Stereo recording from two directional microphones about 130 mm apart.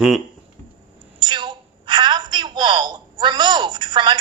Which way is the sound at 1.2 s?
35° right (ahead or behind).